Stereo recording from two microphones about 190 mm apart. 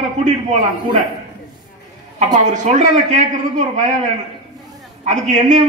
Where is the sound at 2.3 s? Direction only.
40° right (ahead or behind).